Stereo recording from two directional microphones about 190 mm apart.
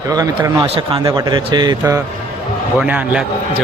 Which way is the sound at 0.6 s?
30° right (ahead or behind).